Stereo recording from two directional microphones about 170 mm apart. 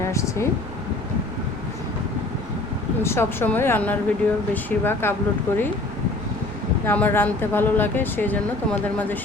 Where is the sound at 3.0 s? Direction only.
15° left (ahead or behind).